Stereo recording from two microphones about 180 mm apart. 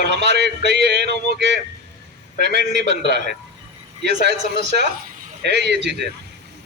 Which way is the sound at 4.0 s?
70° right (ahead or behind).